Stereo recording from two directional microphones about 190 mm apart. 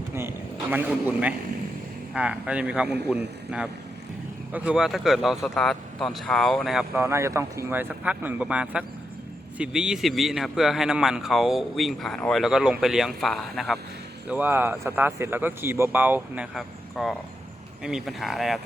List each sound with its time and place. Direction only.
0.1 s a man's voice: 10° right (ahead or behind)
7.0 s a man's voice: 15° right (ahead or behind)